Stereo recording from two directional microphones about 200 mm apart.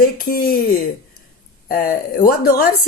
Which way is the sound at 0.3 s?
45° left (ahead or behind).